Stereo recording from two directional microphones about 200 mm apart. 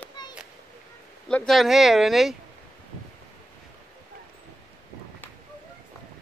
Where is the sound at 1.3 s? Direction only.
Centre (ahead or behind).